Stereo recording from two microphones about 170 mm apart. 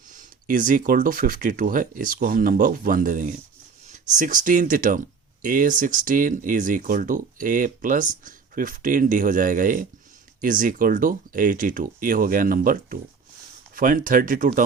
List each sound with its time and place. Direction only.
0.1 s speech: 50° right (ahead or behind)